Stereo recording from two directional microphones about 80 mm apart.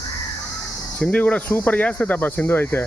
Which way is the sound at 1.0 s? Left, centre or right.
Centre.